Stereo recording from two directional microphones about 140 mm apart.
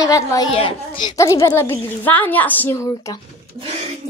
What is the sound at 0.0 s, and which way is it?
Speech, 25° left (ahead or behind).